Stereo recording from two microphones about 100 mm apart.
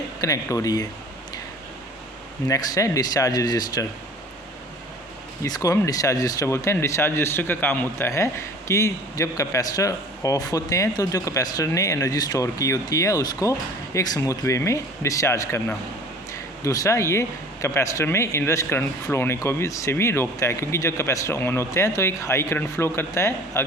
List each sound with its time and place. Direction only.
0.2 s speech: 35° left (ahead or behind)
2.5 s speech: 35° left (ahead or behind)
5.5 s speech: 40° left (ahead or behind)